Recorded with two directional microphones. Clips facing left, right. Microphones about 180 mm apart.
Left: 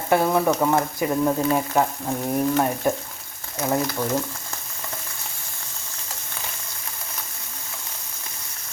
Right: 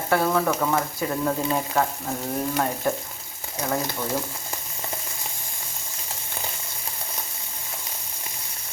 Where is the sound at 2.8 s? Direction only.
15° left (ahead or behind).